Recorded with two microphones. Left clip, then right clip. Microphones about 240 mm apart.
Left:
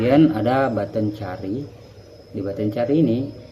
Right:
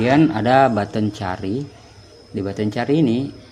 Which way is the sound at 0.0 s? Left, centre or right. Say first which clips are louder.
Even; centre.